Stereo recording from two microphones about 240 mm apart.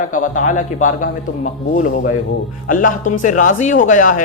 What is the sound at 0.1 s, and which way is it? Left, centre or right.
Speech, left.